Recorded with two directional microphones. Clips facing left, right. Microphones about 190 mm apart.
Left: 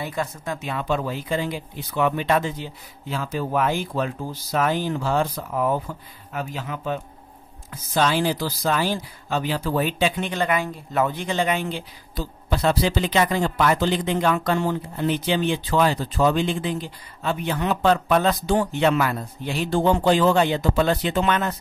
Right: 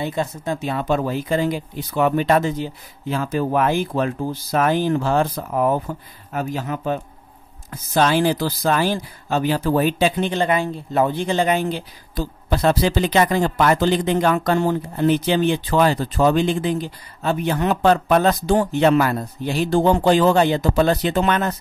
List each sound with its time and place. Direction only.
0.0 s speech: 25° right (ahead or behind); by 21.5 s 40° right (ahead or behind)